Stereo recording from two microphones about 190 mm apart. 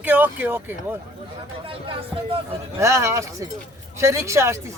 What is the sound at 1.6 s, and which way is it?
Music, 30° right (ahead or behind).